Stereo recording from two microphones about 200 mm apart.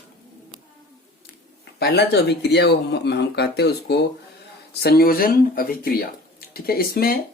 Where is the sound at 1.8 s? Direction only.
55° left (ahead or behind).